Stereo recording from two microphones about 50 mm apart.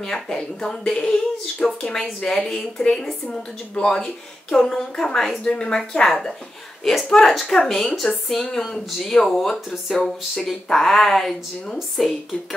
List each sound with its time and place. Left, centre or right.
0.0 s speech: centre